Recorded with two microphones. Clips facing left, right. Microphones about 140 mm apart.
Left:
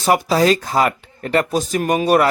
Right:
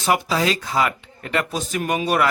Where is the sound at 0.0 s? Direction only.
40° left (ahead or behind).